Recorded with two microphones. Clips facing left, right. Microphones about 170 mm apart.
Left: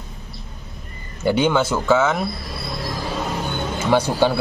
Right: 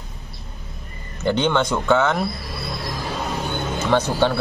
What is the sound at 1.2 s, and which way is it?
Speech, 10° left (ahead or behind).